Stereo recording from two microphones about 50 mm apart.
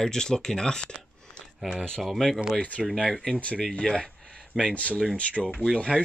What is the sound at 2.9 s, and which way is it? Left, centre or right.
Speech, centre.